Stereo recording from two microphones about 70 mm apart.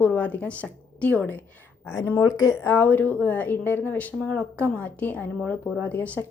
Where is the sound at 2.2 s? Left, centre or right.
Left.